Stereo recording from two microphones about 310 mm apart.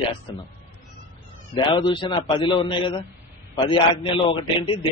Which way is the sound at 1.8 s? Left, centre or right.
Centre.